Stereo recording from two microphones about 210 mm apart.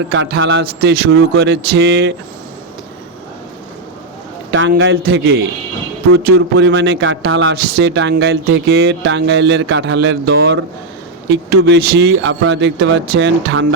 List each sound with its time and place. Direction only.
0.1 s speech: 65° right (ahead or behind)
4.8 s speech: 55° right (ahead or behind)
6.3 s speech: 60° right (ahead or behind)
7.5 s speech: 50° right (ahead or behind)